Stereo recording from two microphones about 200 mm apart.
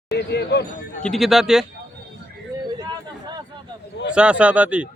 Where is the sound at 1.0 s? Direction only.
Centre (ahead or behind).